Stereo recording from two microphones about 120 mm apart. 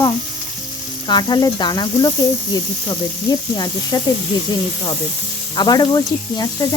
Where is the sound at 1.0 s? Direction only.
35° left (ahead or behind).